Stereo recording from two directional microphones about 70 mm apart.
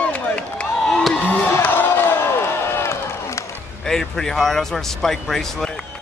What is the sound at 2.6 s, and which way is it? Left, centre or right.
Run, left.